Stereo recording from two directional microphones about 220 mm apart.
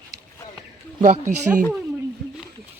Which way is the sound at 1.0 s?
30° right (ahead or behind).